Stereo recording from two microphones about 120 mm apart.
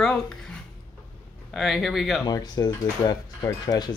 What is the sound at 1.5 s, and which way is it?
Speech, centre (ahead or behind).